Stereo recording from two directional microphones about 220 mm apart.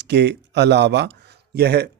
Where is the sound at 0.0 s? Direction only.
50° right (ahead or behind).